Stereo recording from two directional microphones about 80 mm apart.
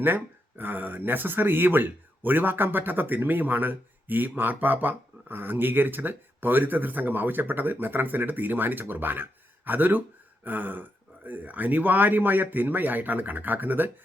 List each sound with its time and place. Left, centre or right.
0.0 s speech: right